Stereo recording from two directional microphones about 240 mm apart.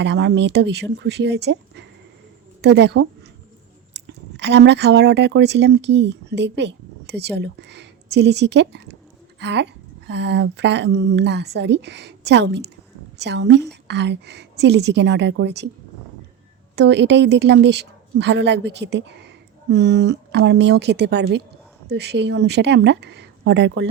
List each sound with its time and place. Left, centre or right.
0.0 s a woman's voice: right
16.7 s a woman's voice: right